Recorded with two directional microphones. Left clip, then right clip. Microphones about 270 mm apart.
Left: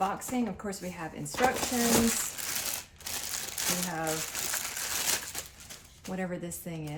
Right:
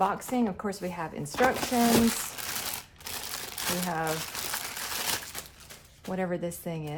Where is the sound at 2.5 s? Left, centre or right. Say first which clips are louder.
Even; centre.